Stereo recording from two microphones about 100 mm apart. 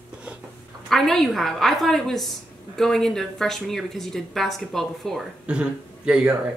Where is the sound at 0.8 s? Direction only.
5° left (ahead or behind).